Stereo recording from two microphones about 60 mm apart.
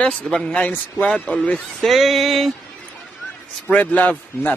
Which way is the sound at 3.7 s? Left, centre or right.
Left.